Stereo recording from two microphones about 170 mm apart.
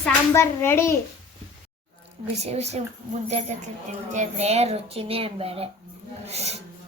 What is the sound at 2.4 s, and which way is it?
Speech, 40° right (ahead or behind).